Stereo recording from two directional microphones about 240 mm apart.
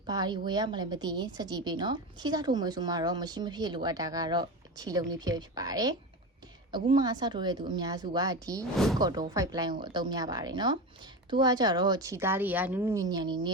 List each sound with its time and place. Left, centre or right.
0.1 s a woman's voice: centre
8.7 s speech: centre
9.0 s a woman's voice: centre